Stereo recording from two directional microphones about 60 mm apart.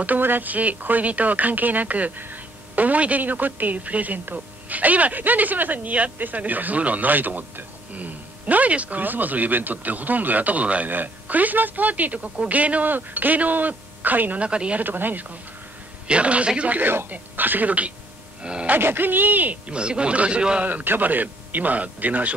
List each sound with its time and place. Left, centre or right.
0.0 s speech: right
14.8 s speech: right
16.1 s speech: right
18.4 s a sound: centre
18.7 s speech: right
19.7 s a man's voice: centre
20.6 s speech: right